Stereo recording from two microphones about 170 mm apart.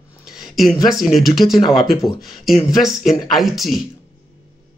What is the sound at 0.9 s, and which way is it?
Speech, centre (ahead or behind).